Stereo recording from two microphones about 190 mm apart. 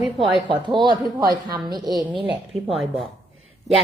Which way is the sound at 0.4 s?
25° right (ahead or behind).